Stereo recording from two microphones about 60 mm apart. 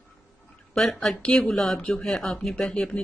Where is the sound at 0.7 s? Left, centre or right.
Centre.